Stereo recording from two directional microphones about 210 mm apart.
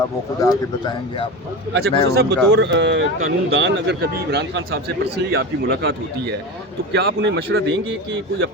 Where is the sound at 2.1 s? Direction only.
50° right (ahead or behind).